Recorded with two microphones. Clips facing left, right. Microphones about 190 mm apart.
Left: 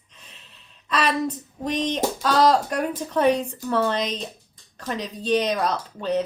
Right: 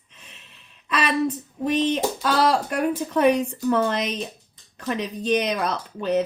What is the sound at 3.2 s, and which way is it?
Speech, 30° left (ahead or behind).